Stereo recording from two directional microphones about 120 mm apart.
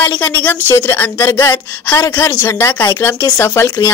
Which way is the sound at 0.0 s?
15° left (ahead or behind).